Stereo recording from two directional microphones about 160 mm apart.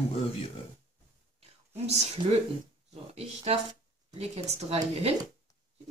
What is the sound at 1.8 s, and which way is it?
Speech, 40° right (ahead or behind).